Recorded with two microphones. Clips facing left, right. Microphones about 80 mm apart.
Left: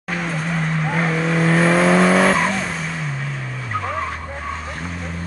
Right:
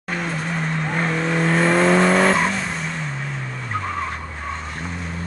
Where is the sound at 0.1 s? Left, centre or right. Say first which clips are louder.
Left 1 dB; centre.